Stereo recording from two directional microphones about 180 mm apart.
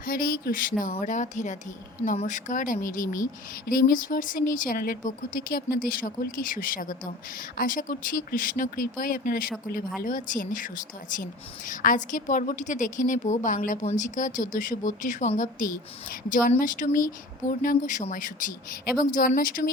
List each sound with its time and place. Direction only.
0.0 s speech: 50° left (ahead or behind)